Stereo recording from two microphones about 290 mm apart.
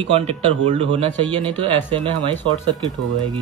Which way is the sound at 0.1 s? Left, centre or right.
Centre.